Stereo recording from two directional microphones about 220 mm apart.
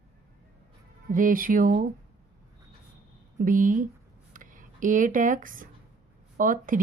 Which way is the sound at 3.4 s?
35° right (ahead or behind).